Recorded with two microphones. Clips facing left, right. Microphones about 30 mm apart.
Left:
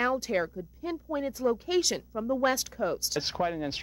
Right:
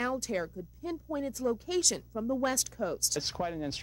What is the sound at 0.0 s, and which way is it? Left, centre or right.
Speech, left.